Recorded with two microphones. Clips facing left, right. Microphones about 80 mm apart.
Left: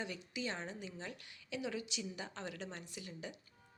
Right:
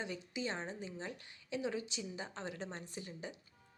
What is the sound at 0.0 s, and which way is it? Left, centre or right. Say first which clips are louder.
A woman's voice: right 1 dB; right.